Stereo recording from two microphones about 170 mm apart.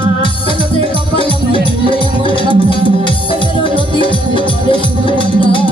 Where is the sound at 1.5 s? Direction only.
30° left (ahead or behind).